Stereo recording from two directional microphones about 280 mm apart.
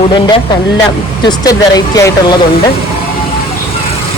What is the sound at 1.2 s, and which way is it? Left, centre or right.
Speech, centre.